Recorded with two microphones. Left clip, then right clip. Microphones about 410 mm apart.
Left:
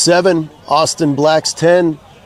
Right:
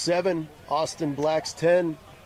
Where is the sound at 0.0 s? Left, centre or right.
Left.